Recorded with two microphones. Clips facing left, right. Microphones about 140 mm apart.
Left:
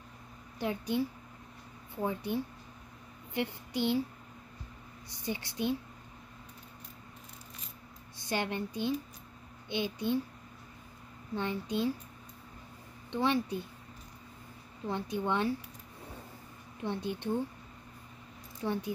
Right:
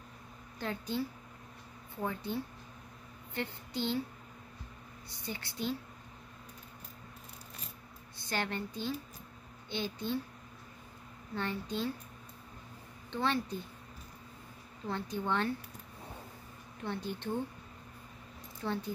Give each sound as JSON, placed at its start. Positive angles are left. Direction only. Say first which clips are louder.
{"t": 0.6, "sound": "a woman's voice", "louder": "left 4 dB", "side_deg": 15}
{"t": 2.0, "sound": "a woman's voice", "louder": "left 3 dB", "side_deg": 15}
{"t": 5.2, "sound": "a woman's voice", "louder": "left 4 dB", "side_deg": 20}
{"t": 8.3, "sound": "a woman's voice", "louder": "left 3 dB", "side_deg": 15}
{"t": 11.3, "sound": "a woman's voice", "louder": "left 3 dB", "side_deg": 15}
{"t": 13.1, "sound": "a woman's voice", "louder": "left 3 dB", "side_deg": 15}
{"t": 14.9, "sound": "a woman's voice", "louder": "left 2 dB", "side_deg": 15}
{"t": 16.8, "sound": "a woman's voice", "louder": "left 3 dB", "side_deg": 15}
{"t": 18.6, "sound": "a woman's voice", "louder": "left 2 dB", "side_deg": 15}